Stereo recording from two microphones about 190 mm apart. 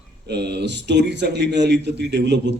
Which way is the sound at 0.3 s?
60° right (ahead or behind).